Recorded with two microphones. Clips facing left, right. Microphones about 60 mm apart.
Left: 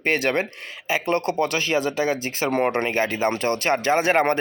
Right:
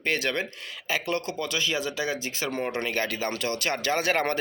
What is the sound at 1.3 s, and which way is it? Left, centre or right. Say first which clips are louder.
Speech: left 7 dB; left.